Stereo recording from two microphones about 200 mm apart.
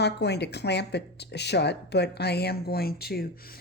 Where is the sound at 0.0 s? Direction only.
55° left (ahead or behind).